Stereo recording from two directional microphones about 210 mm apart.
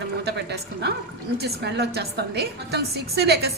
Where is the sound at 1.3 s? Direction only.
50° right (ahead or behind).